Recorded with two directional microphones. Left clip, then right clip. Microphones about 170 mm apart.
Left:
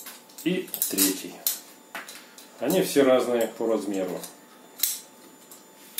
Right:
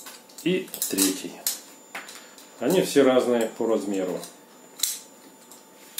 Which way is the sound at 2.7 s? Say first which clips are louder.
Right 1 dB; 40° right (ahead or behind).